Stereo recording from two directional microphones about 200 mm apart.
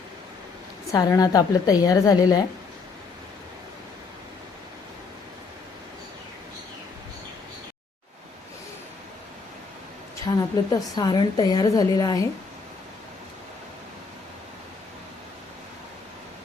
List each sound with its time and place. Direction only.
0.9 s a woman's voice: 15° left (ahead or behind)
10.2 s a woman's voice: 20° left (ahead or behind)